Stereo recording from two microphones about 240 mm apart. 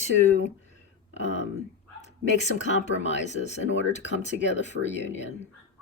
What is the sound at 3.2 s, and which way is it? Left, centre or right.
Speech, left.